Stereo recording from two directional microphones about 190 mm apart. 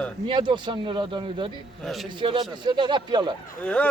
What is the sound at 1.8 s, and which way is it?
Speech, centre (ahead or behind).